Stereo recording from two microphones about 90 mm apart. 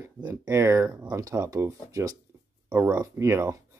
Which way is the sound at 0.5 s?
35° right (ahead or behind).